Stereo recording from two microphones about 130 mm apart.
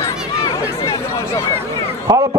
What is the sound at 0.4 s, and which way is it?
Chatter, 25° left (ahead or behind).